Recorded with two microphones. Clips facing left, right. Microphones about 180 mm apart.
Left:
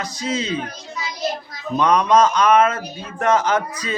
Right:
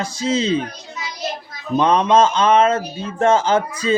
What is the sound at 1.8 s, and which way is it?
Speech, 25° right (ahead or behind).